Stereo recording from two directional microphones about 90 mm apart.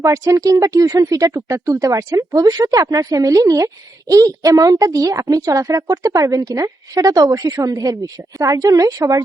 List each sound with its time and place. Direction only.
0.0 s a woman's voice: 40° right (ahead or behind)